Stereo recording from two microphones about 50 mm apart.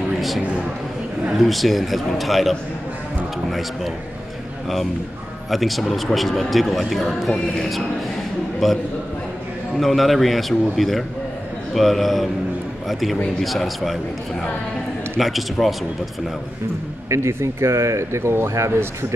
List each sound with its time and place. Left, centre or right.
1.4 s a man's voice: centre
5.5 s a man's voice: centre
15.1 s a man's voice: centre
17.1 s speech: right